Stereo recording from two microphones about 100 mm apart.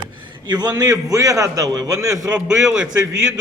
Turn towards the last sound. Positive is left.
turn(degrees=-10)  # may be behind; listen again after turning